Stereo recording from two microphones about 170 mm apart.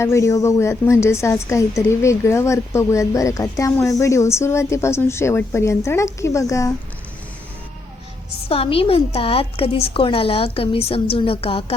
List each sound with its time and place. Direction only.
0.0 s a woman's voice: 15° left (ahead or behind)
8.4 s a woman's voice: 35° left (ahead or behind)